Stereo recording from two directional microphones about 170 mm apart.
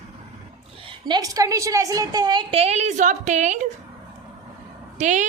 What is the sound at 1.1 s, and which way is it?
A woman's voice, 20° right (ahead or behind).